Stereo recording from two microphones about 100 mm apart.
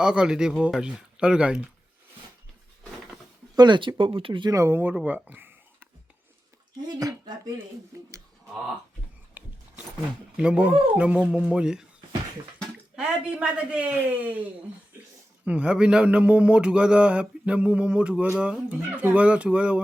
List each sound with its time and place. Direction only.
0.0 s speech: 10° right (ahead or behind)
3.5 s speech: 45° right (ahead or behind)
4.5 s speech: 25° right (ahead or behind)
5.0 s a sound: 15° right (ahead or behind)
6.8 s speech: 40° right (ahead or behind)
9.4 s a sound: 15° right (ahead or behind)
10.3 s speech: 10° right (ahead or behind)
15.4 s speech: 10° right (ahead or behind)